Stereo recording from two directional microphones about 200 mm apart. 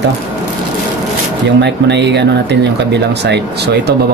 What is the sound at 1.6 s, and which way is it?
Speech, 60° right (ahead or behind).